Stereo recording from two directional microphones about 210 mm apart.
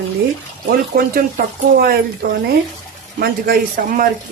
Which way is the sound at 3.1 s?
45° right (ahead or behind).